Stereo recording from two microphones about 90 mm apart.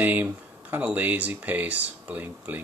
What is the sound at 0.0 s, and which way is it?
Speech, 20° right (ahead or behind).